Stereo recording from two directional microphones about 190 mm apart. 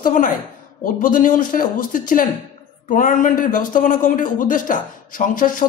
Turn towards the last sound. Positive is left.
turn(degrees=45)  # may be behind; listen again after turning